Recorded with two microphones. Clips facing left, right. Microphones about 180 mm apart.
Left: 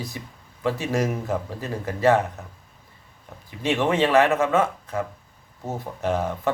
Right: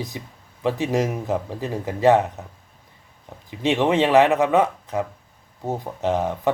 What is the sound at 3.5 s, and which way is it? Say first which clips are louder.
Speech: right 3 dB; 20° right (ahead or behind).